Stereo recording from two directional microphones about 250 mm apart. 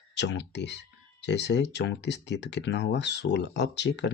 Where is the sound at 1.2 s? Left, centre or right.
Left.